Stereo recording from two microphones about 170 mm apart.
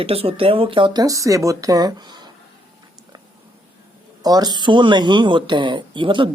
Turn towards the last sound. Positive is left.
turn(degrees=-30)  # may be behind; listen again after turning